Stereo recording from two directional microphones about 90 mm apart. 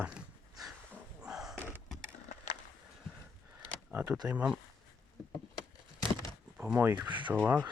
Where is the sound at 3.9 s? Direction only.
20° right (ahead or behind).